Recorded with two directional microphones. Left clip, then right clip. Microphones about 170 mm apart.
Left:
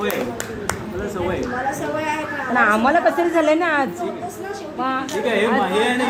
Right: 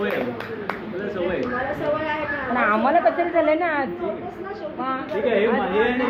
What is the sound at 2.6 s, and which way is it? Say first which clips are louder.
A woman's voice: left 3 dB; 90° left.